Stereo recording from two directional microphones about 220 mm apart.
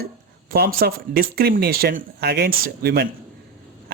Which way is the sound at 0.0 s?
45° right (ahead or behind).